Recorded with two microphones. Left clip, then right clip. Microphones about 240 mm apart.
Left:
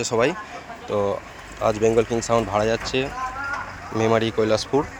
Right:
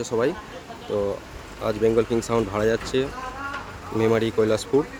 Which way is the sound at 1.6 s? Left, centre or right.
Centre.